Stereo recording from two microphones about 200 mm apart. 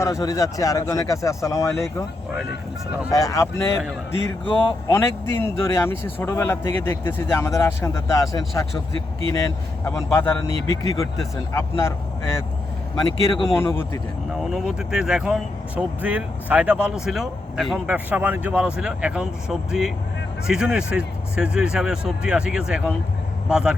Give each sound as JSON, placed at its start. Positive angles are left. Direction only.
{"t": 0.0, "sound": "speech", "side_deg": 15}
{"t": 3.1, "sound": "speech", "side_deg": 15}
{"t": 4.9, "sound": "speech", "side_deg": 15}
{"t": 14.5, "sound": "speech", "side_deg": -5}